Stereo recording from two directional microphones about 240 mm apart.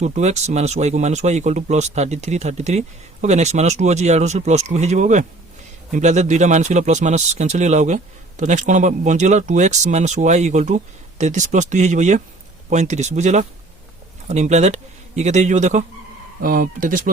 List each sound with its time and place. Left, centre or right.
0.0 s speech: right